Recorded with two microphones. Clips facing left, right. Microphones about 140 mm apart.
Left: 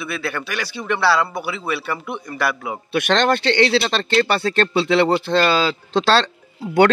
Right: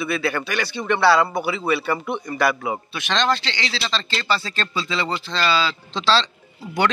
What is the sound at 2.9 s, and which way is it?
A man's voice, 60° left (ahead or behind).